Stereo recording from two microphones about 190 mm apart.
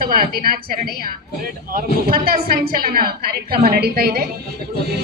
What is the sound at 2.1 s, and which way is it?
A woman's voice, 55° right (ahead or behind).